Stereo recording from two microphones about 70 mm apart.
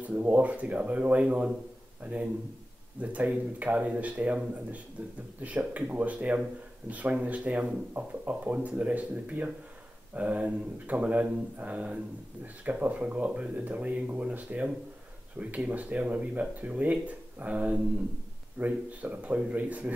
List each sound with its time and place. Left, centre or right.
0.0 s a man's voice: right